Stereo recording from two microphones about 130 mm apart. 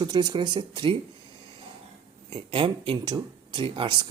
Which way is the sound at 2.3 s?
40° right (ahead or behind).